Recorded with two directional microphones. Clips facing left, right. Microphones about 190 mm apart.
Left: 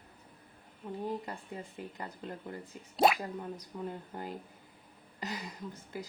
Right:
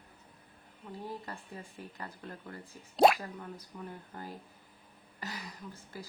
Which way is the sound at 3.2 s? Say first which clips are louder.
Left 4 dB; 20° left (ahead or behind).